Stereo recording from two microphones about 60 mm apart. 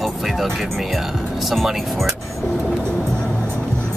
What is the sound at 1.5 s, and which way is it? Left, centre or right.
Speech, centre.